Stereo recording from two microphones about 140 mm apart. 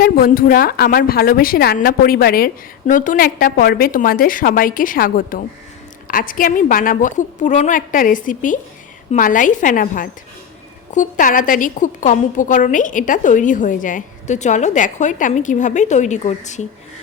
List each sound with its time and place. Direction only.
0.0 s a woman's voice: 90° left
6.1 s a woman's voice: 80° left; by 16.6 s 55° left (ahead or behind)